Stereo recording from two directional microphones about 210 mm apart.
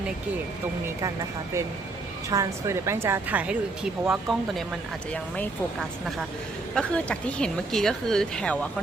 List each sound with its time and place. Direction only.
2.3 s a woman's voice: 15° right (ahead or behind)
6.7 s speech: 5° left (ahead or behind)